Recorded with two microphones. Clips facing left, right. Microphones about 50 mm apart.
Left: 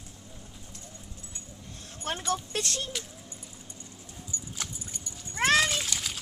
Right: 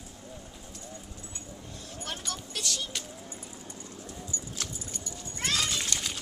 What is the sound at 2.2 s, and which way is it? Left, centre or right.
Speech, left.